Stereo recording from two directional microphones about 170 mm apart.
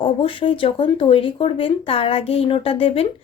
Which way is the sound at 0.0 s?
30° left (ahead or behind).